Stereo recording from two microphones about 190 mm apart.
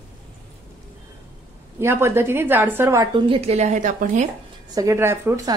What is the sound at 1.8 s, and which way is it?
A woman's voice, 15° right (ahead or behind).